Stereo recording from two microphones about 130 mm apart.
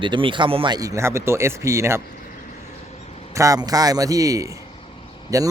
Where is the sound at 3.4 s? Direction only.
25° right (ahead or behind).